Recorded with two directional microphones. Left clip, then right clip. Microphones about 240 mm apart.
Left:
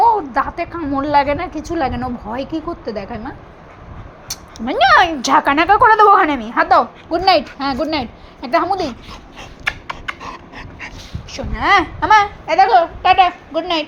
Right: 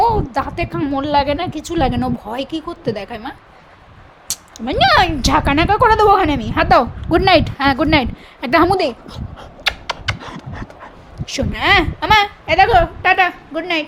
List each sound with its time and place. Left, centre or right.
0.0 s a woman's voice: centre
4.3 s a woman's voice: centre
8.5 s speech: right
11.5 s a woman's voice: right